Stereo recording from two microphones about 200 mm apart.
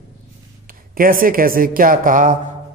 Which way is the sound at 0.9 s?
45° right (ahead or behind).